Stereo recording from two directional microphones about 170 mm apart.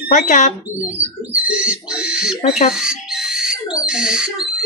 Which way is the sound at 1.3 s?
5° right (ahead or behind).